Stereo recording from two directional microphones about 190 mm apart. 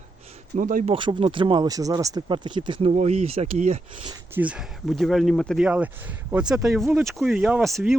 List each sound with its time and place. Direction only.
0.5 s speech: 45° right (ahead or behind)
0.9 s speech: 25° right (ahead or behind)
4.4 s speech: 5° right (ahead or behind)